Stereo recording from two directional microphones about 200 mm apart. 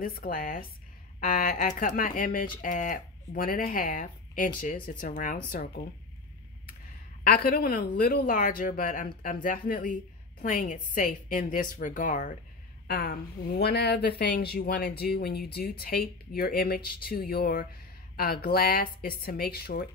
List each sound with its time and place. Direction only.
0.0 s a woman's voice: 45° left (ahead or behind)
7.2 s a woman's voice: 50° left (ahead or behind)
12.8 s speech: 55° left (ahead or behind)